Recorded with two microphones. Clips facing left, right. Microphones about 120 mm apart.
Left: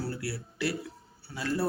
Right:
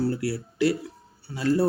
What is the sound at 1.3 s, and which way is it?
Speech, 25° right (ahead or behind).